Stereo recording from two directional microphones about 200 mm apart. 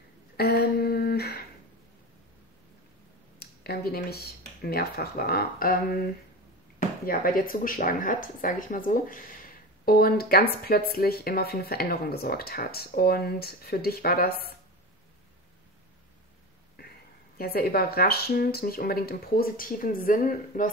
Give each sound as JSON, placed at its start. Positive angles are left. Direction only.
{"t": 0.4, "sound": "humming", "side_deg": 50}
{"t": 3.3, "sound": "speech", "side_deg": 50}
{"t": 7.1, "sound": "speech", "side_deg": 45}
{"t": 16.8, "sound": "a sound", "side_deg": 50}
{"t": 17.4, "sound": "speech", "side_deg": 50}